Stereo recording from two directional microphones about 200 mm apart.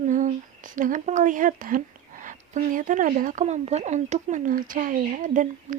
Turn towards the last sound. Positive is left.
turn(degrees=-40)  # may be behind; listen again after turning